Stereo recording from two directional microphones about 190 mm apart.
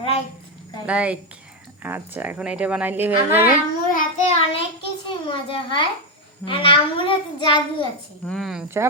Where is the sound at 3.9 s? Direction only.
45° left (ahead or behind).